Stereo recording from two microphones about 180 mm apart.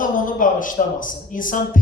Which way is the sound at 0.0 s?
50° left (ahead or behind).